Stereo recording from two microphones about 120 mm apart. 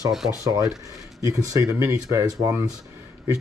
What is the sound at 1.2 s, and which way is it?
Speech, 25° right (ahead or behind).